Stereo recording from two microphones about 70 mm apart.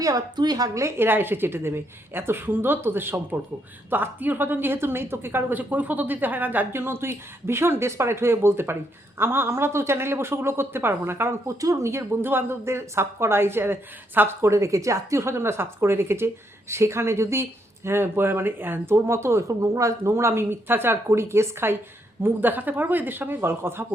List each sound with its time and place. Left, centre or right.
0.0 s a woman's voice: right
0.7 s a woman's voice: right
0.9 s a woman's voice: right
11.6 s a woman's voice: right
14.4 s a woman's voice: right